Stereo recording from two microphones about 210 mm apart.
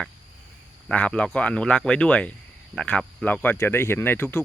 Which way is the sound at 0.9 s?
5° left (ahead or behind).